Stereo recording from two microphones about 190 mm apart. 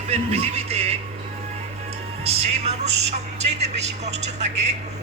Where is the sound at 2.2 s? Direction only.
30° right (ahead or behind).